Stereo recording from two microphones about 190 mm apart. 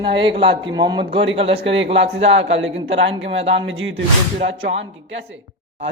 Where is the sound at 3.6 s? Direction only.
80° right.